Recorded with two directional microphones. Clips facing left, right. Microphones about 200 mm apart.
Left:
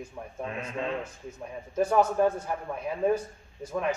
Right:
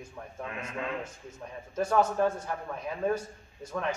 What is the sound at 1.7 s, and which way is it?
Speech, 10° left (ahead or behind).